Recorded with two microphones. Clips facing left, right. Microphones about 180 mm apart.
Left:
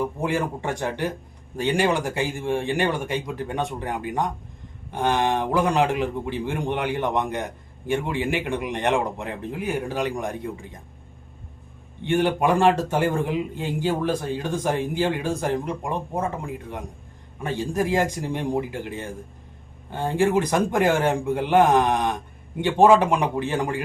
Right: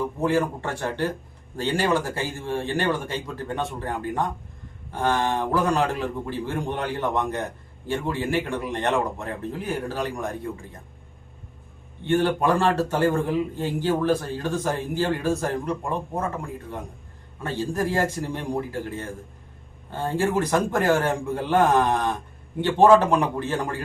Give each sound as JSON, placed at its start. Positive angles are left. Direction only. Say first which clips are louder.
{"t": 0.2, "sound": "a man's voice", "louder": "right 2 dB", "side_deg": 15}
{"t": 12.0, "sound": "a man's voice", "louder": "even", "side_deg": 15}
{"t": 17.4, "sound": "a man's voice", "louder": "left 1 dB", "side_deg": 15}